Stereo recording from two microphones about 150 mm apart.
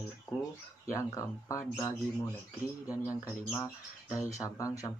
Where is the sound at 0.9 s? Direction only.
20° left (ahead or behind).